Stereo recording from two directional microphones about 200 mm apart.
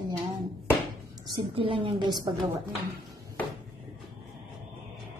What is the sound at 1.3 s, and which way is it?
Speech, 25° right (ahead or behind).